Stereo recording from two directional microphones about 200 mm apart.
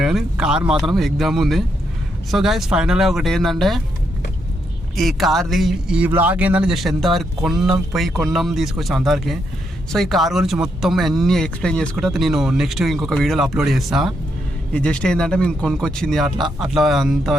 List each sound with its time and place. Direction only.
0.0 s a man's voice: centre (ahead or behind)
4.9 s a man's voice: centre (ahead or behind)